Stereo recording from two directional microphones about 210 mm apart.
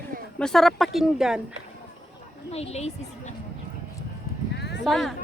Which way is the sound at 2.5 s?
30° left (ahead or behind).